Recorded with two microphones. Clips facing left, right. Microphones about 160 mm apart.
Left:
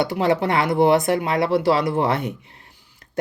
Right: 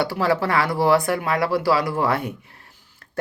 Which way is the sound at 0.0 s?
20° left (ahead or behind).